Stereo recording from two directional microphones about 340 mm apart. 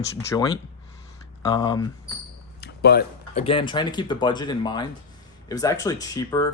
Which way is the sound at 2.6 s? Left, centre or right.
Left.